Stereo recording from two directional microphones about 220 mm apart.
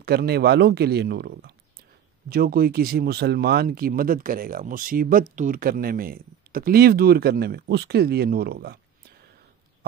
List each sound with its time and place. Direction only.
0.0 s speech: 45° right (ahead or behind)